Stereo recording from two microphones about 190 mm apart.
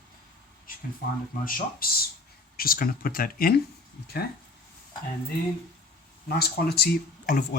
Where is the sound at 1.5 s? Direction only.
45° left (ahead or behind).